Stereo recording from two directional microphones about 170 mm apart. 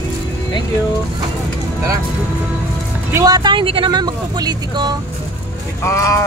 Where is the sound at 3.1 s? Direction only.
20° right (ahead or behind).